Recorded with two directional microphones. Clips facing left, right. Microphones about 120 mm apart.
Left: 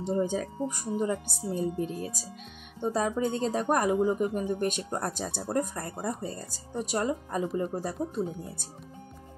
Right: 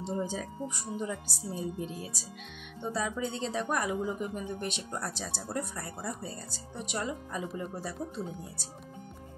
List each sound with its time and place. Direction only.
0.0 s speech: 55° left (ahead or behind)